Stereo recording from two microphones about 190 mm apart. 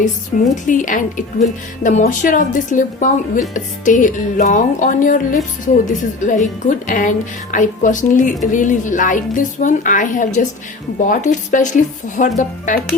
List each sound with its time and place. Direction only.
0.5 s a woman's voice: 40° left (ahead or behind)